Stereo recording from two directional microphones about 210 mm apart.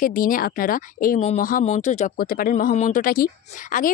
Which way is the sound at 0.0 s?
40° left (ahead or behind).